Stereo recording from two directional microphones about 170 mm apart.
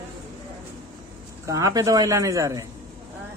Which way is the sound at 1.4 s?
20° right (ahead or behind).